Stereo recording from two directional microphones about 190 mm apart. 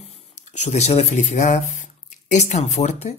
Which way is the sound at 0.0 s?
35° left (ahead or behind).